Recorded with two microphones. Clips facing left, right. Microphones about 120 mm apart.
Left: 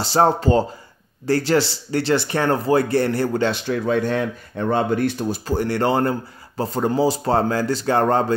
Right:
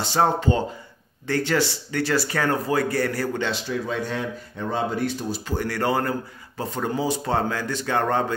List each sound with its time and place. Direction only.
0.0 s speech: 35° left (ahead or behind)
3.4 s a man's voice: 60° left (ahead or behind)
5.5 s speech: 30° left (ahead or behind)